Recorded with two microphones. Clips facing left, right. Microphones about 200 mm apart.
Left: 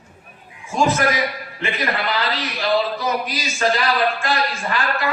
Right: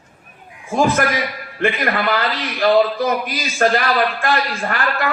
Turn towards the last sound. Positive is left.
turn(degrees=-55)  # may be behind; listen again after turning